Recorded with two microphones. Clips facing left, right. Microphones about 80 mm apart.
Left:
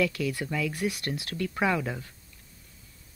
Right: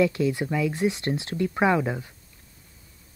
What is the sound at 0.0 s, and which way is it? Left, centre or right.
Speech, right.